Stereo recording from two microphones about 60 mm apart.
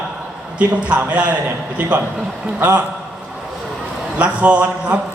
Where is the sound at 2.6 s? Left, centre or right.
Right.